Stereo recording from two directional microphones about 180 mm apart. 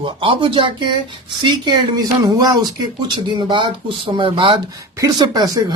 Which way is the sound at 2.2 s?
20° right (ahead or behind).